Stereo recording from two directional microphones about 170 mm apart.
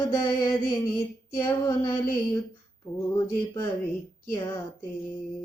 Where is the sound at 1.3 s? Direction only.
15° left (ahead or behind).